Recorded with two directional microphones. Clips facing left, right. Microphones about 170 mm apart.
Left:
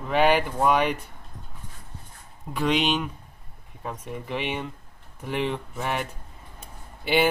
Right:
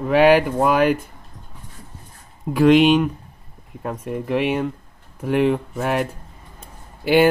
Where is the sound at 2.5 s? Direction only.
5° right (ahead or behind).